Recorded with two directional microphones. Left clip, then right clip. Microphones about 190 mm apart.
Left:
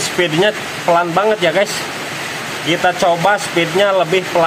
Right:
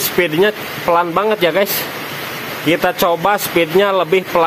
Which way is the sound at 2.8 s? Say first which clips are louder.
Left 4 dB; 50° right (ahead or behind).